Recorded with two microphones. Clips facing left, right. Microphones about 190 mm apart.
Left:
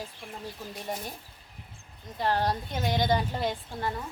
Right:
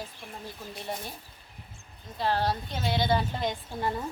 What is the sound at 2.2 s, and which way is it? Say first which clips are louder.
Speech: even; 15° left (ahead or behind).